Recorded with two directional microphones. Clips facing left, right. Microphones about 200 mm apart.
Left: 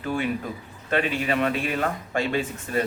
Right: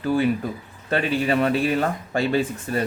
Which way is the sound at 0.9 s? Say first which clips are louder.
Right 3 dB; 35° right (ahead or behind).